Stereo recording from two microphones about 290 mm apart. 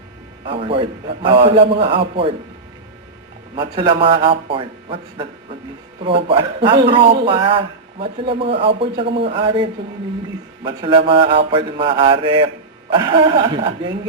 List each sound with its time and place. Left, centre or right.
0.4 s a man's voice: centre
3.5 s a man's voice: centre
6.2 s a man's voice: centre